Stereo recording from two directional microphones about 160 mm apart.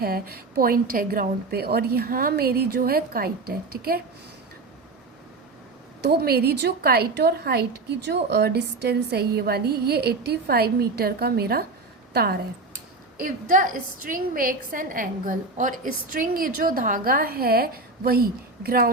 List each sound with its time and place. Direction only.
0.0 s a woman's voice: 70° right (ahead or behind)
6.0 s a woman's voice: 85° right
13.1 s a woman's voice: 55° right (ahead or behind)